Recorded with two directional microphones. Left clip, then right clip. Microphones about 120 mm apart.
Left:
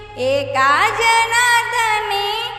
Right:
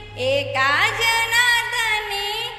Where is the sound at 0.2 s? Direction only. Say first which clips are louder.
Left 4 dB; 55° left (ahead or behind).